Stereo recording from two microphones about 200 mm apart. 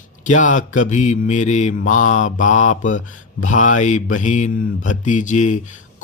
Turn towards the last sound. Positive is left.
turn(degrees=40)  # may be behind; listen again after turning